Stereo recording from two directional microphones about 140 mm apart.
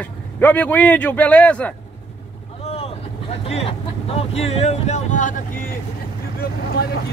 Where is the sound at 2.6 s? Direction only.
45° left (ahead or behind); by 5.4 s 65° left (ahead or behind).